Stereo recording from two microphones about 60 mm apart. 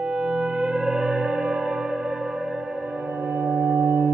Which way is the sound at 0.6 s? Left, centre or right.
Centre.